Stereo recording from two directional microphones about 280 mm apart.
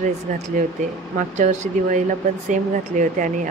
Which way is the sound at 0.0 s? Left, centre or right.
Right.